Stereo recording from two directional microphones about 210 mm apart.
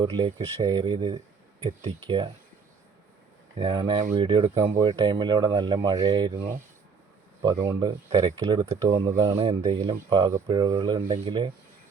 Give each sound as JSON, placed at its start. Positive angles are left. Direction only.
{"t": 0.0, "sound": "speech", "side_deg": -20}
{"t": 3.6, "sound": "speech", "side_deg": -25}
{"t": 7.4, "sound": "speech", "side_deg": -20}
{"t": 9.3, "sound": "speech", "side_deg": -30}